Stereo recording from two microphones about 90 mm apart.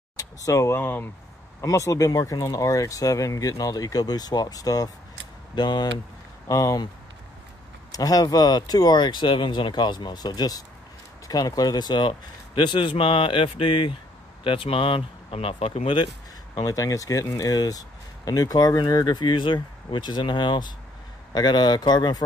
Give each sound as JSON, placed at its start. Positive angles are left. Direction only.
{"t": 0.2, "sound": "speech", "side_deg": 40}
{"t": 1.6, "sound": "speech", "side_deg": 35}
{"t": 5.5, "sound": "a man's voice", "side_deg": 55}
{"t": 6.4, "sound": "speech", "side_deg": 40}
{"t": 7.9, "sound": "a man's voice", "side_deg": 45}
{"t": 16.5, "sound": "speech", "side_deg": 40}